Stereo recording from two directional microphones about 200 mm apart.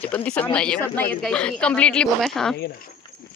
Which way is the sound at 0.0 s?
5° left (ahead or behind).